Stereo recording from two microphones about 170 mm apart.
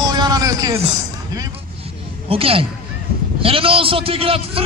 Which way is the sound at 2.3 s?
35° right (ahead or behind).